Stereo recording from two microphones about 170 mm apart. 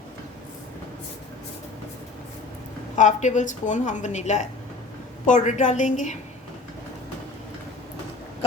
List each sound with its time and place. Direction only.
2.9 s speech: 45° left (ahead or behind)